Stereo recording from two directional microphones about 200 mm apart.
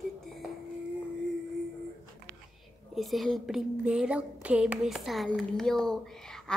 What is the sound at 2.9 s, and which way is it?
Speech, centre (ahead or behind).